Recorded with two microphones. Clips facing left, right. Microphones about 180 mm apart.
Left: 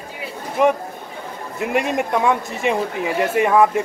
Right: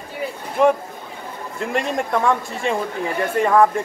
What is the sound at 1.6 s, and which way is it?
Speech, 10° left (ahead or behind).